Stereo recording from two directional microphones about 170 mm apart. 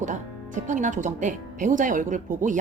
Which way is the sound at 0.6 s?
45° right (ahead or behind).